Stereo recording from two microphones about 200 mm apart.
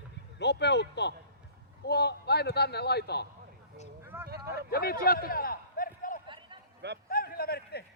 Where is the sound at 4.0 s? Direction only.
10° right (ahead or behind).